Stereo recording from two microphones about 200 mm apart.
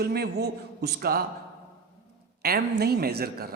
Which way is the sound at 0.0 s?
50° right (ahead or behind).